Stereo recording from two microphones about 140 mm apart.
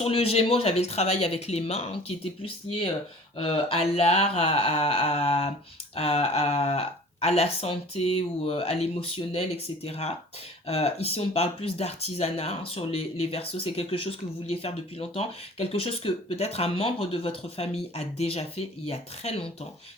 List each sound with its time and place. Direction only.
0.0 s speech: 45° left (ahead or behind)